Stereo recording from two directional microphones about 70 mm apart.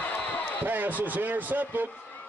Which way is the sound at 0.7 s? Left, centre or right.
Right.